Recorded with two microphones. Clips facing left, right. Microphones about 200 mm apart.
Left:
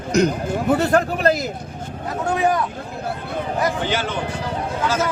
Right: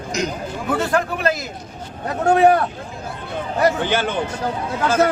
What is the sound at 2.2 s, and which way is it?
Speech, 65° right (ahead or behind).